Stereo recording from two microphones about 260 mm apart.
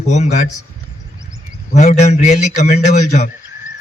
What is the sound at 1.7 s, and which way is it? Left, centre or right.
Speech, left.